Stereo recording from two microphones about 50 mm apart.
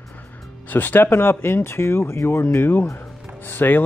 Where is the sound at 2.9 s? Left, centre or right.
Left.